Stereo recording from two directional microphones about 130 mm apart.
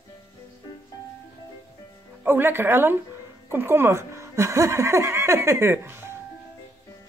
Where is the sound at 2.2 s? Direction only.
15° right (ahead or behind).